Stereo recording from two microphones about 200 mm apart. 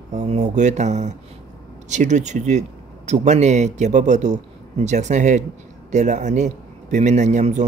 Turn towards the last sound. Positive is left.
turn(degrees=-35)  # may be behind; listen again after turning